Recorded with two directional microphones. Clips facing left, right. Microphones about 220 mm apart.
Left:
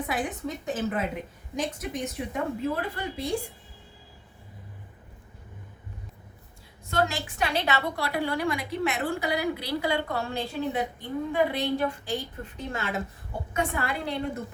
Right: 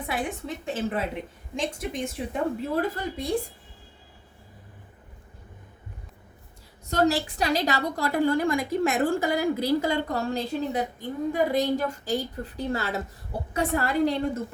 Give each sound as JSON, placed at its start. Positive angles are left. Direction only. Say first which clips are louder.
{"t": 0.1, "sound": "a woman's voice", "louder": "even", "side_deg": -25}
{"t": 6.8, "sound": "a woman's voice", "louder": "right 5 dB", "side_deg": -40}